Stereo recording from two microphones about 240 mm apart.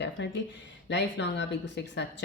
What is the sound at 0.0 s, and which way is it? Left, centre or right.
Speech, left.